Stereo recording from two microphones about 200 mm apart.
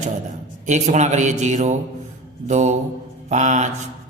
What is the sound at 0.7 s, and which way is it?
Speech, 35° right (ahead or behind).